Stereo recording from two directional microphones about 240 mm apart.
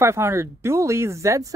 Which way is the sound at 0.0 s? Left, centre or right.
Centre.